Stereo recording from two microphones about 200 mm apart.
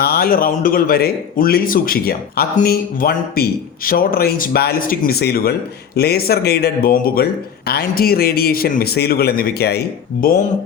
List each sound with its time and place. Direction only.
0.0 s speech: 50° left (ahead or behind)